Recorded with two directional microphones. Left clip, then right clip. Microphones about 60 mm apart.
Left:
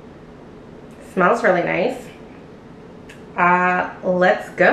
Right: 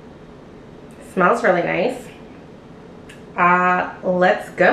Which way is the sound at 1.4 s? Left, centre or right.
Right.